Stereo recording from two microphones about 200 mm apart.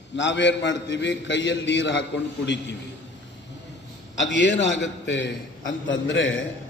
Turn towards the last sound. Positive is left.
turn(degrees=70)  # may be behind; listen again after turning